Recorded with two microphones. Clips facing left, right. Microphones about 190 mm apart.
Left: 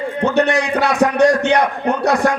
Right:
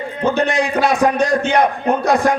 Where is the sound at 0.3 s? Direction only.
70° left (ahead or behind).